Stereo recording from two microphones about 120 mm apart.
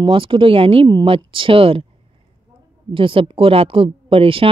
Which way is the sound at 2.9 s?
45° right (ahead or behind).